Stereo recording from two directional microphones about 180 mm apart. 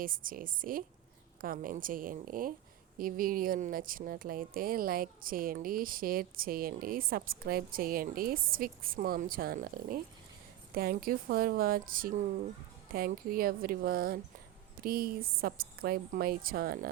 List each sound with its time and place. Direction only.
0.0 s a woman's voice: 50° right (ahead or behind)